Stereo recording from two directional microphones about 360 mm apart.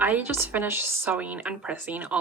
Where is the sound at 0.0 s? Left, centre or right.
Centre.